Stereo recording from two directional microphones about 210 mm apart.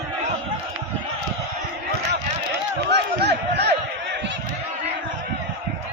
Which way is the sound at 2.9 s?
50° right (ahead or behind).